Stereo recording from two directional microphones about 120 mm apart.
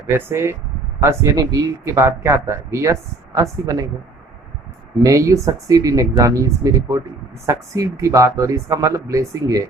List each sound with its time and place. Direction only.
0.3 s speech: 20° right (ahead or behind)
5.0 s speech: 25° right (ahead or behind)